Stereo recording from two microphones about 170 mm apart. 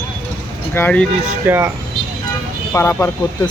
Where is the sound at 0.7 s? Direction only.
10° left (ahead or behind).